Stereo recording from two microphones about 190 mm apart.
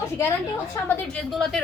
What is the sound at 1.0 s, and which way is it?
Speech, centre (ahead or behind).